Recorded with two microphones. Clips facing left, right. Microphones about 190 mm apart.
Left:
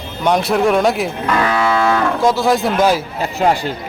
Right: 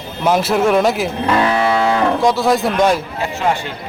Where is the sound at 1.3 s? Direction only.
25° right (ahead or behind).